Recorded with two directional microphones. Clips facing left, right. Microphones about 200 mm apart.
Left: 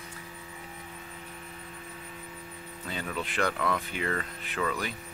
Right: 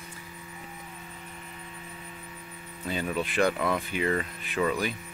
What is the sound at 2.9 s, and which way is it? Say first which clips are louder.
Speech: right 5 dB; 15° right (ahead or behind).